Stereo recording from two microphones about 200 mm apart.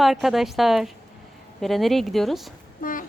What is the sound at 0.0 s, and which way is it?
Speech, centre (ahead or behind).